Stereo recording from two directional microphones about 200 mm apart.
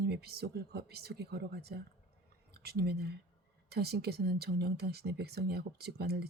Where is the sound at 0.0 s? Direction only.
50° right (ahead or behind).